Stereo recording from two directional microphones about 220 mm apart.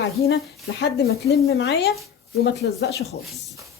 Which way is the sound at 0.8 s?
45° left (ahead or behind).